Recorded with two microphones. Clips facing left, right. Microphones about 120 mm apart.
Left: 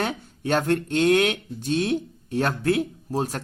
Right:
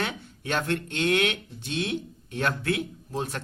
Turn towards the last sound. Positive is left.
turn(degrees=40)  # may be behind; listen again after turning